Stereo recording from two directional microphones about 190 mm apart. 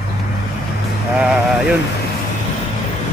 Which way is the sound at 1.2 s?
5° right (ahead or behind).